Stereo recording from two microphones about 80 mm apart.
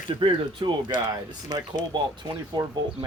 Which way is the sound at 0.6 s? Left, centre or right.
Right.